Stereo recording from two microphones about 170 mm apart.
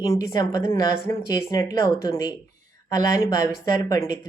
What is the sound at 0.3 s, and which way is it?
Speech, 25° left (ahead or behind).